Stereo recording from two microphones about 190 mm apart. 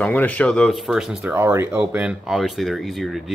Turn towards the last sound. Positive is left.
turn(degrees=0)  # may be behind; listen again after turning